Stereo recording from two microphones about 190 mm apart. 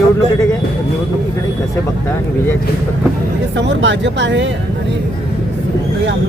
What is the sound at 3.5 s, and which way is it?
Speech, 70° right (ahead or behind).